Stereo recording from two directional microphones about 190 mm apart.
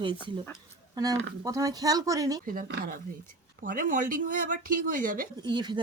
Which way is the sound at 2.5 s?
45° right (ahead or behind).